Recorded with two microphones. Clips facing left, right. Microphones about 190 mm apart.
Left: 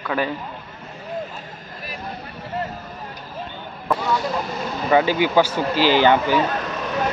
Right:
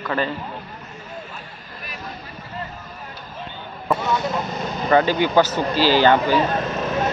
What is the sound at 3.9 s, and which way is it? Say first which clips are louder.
Vehicle: even; 20° right (ahead or behind).